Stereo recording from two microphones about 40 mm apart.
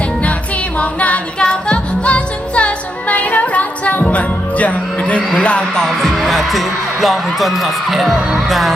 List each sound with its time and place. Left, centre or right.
0.8 s music: left
1.4 s music: left
5.4 s speech: left
5.7 s music: centre
6.1 s speech: centre